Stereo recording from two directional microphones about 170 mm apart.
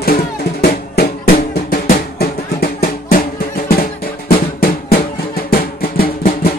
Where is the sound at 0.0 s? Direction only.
65° left (ahead or behind).